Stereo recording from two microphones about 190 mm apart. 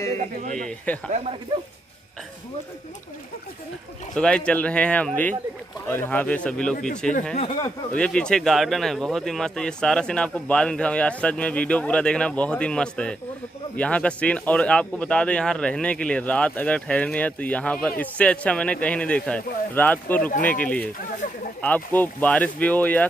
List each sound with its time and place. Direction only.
0.6 s speech: 5° left (ahead or behind)
4.1 s speech: 5° left (ahead or behind)
20.2 s speech: 45° left (ahead or behind)
20.4 s speech: 5° left (ahead or behind)